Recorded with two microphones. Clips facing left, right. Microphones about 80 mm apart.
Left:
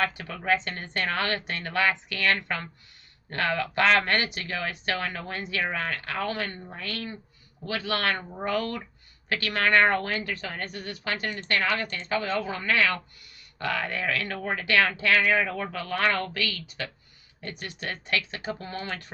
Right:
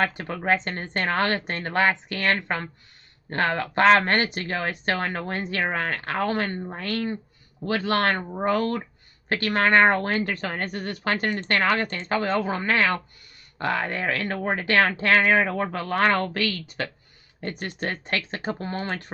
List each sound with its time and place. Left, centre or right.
0.0 s speech: right